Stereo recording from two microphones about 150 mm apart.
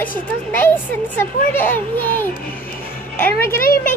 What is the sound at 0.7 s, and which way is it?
A child's voice, 10° left (ahead or behind).